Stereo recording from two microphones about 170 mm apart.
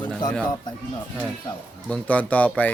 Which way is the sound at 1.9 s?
10° left (ahead or behind).